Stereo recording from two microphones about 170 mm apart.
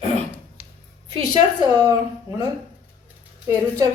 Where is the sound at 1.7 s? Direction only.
20° right (ahead or behind).